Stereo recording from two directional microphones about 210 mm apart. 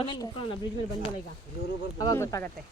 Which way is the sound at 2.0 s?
15° left (ahead or behind).